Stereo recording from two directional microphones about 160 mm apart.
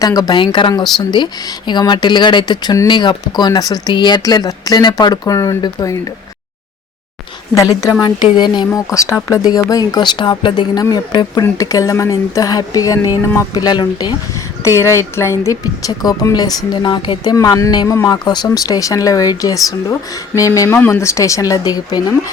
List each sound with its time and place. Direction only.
0.0 s a woman's voice: 25° left (ahead or behind)
7.5 s a woman's voice: 20° left (ahead or behind)